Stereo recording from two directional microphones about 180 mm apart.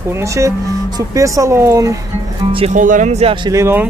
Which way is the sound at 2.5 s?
35° right (ahead or behind).